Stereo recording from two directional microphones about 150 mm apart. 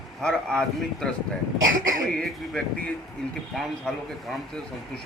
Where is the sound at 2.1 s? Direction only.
5° left (ahead or behind).